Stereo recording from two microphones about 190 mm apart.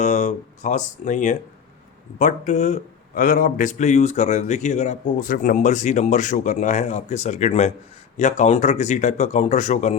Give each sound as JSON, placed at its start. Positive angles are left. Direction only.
{"t": 0.0, "sound": "speech", "side_deg": 40}